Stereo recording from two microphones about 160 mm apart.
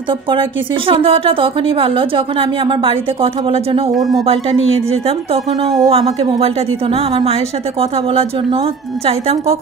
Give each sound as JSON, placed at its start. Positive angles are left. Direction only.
{"t": 0.8, "sound": "a woman's voice", "side_deg": -35}